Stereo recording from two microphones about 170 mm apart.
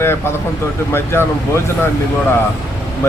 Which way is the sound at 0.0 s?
15° left (ahead or behind).